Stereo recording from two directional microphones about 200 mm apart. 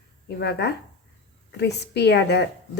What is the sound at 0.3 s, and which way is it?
Speech, 55° left (ahead or behind).